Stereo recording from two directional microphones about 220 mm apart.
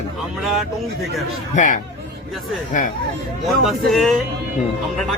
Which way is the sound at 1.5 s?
35° left (ahead or behind).